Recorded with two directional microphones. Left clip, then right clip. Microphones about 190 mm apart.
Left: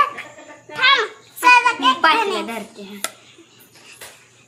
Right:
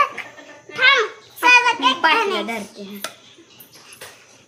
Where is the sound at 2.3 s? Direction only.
5° left (ahead or behind).